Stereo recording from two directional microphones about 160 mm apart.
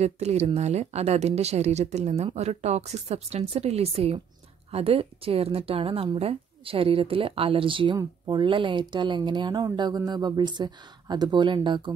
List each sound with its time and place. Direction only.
0.0 s a woman's voice: 45° right (ahead or behind)